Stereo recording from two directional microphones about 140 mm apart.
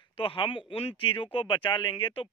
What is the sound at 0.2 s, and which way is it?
Speech, 40° left (ahead or behind).